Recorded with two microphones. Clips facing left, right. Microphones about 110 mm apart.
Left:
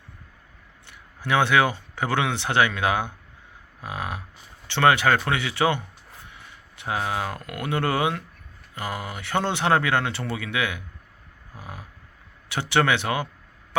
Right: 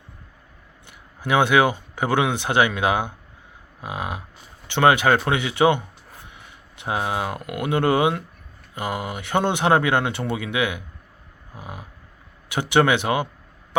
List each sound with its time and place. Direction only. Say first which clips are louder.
0.9 s speech: right 2 dB; 15° right (ahead or behind)
3.8 s livestock: right 2 dB; 15° right (ahead or behind)
4.7 s speech: right 2 dB; 15° right (ahead or behind)